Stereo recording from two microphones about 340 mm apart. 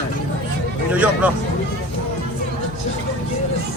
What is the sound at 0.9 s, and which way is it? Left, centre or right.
Speech, centre.